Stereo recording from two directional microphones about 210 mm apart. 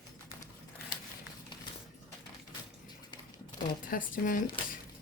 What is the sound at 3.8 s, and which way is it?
Speech, 40° left (ahead or behind).